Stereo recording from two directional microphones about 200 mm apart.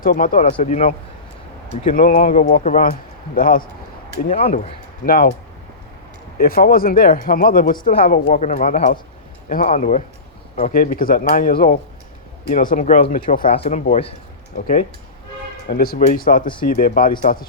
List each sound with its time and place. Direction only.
0.0 s speech: 45° left (ahead or behind)
1.9 s speech: 45° left (ahead or behind)
4.4 s speech: 30° left (ahead or behind)
5.0 s speech: 45° left (ahead or behind)
6.4 s speech: 45° left (ahead or behind)
13.5 s speech: 30° left (ahead or behind)
14.5 s speech: 45° left (ahead or behind)